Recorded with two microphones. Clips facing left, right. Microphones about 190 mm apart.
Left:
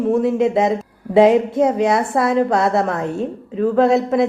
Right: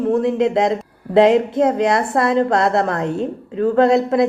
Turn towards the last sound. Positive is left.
turn(degrees=5)  # may be behind; listen again after turning